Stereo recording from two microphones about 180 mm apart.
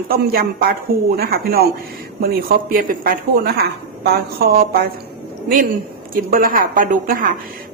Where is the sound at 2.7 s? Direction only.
50° right (ahead or behind).